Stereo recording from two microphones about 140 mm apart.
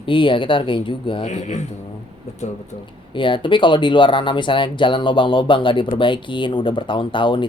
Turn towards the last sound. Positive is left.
turn(degrees=35)  # may be behind; listen again after turning